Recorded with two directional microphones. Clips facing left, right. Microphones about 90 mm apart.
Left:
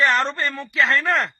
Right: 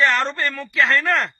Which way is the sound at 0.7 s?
Centre (ahead or behind).